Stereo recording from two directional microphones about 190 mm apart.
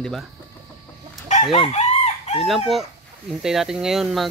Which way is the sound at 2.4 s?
Centre (ahead or behind).